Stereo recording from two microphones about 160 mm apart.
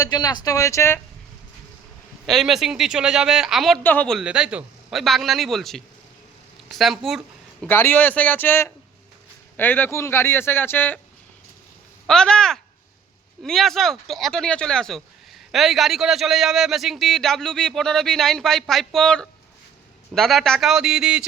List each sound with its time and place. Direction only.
0.0 s speech: 25° left (ahead or behind)
2.2 s speech: centre (ahead or behind)
7.6 s a man's voice: 15° left (ahead or behind)
12.0 s speech: 5° left (ahead or behind)